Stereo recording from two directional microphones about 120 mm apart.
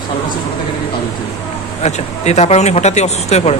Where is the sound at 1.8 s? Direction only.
70° left (ahead or behind).